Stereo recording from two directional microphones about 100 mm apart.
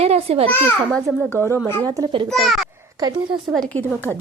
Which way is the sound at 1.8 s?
40° right (ahead or behind).